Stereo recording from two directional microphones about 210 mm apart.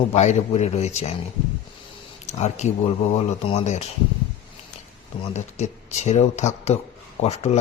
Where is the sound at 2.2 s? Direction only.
35° left (ahead or behind).